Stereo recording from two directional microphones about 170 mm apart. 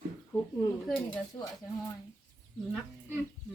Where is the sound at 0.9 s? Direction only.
10° left (ahead or behind).